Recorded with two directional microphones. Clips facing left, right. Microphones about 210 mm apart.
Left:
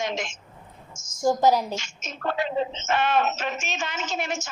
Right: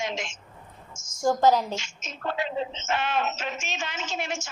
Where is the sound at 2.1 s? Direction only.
45° left (ahead or behind).